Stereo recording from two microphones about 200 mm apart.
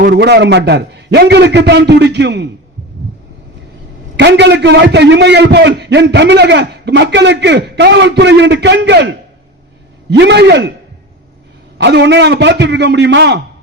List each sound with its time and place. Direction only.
0.0 s a man's voice: 55° right (ahead or behind)
4.2 s a man's voice: 60° right (ahead or behind)
11.8 s a man's voice: 60° right (ahead or behind)